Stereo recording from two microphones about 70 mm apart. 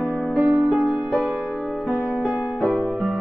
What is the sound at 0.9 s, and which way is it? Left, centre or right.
Music, right.